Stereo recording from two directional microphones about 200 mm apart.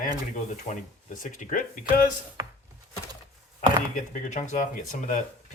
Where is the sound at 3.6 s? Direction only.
40° left (ahead or behind).